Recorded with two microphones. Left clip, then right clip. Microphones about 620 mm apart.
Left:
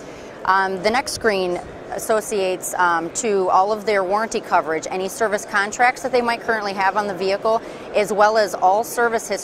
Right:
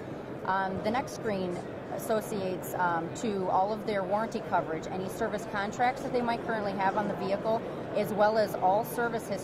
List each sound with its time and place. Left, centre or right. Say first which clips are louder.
0.5 s speech: left 12 dB; left